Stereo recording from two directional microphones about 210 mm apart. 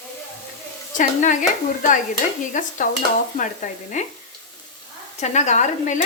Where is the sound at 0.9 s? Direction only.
35° left (ahead or behind).